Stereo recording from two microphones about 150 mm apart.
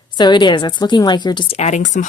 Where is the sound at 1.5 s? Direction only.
50° left (ahead or behind).